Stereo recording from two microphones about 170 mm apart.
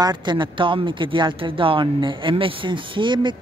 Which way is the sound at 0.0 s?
25° right (ahead or behind).